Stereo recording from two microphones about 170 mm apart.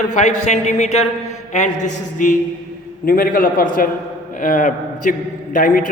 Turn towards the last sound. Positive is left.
turn(degrees=50)  # may be behind; listen again after turning